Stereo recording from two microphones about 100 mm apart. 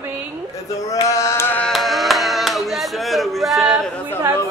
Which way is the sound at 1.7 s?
Centre (ahead or behind).